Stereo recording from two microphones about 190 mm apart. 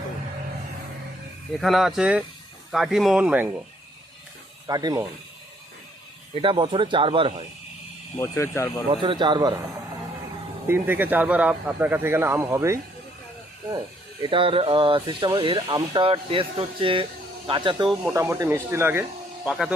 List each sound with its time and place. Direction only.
1.6 s speech: centre (ahead or behind)
4.6 s speech: 20° right (ahead or behind)
6.3 s speech: 25° right (ahead or behind)
8.2 s speech: 15° left (ahead or behind)
8.9 s speech: 25° right (ahead or behind)
10.7 s speech: 10° right (ahead or behind); by 17.9 s 25° right (ahead or behind)
18.0 s speech: 15° right (ahead or behind)